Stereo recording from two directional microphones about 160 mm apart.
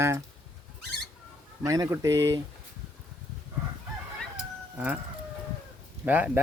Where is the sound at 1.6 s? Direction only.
20° right (ahead or behind).